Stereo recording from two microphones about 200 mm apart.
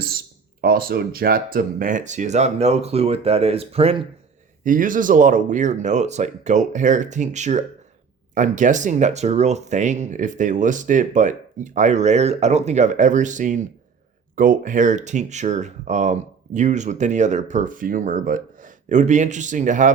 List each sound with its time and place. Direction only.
0.6 s speech: 45° right (ahead or behind); by 4.0 s 30° right (ahead or behind)
4.6 s speech: 40° right (ahead or behind)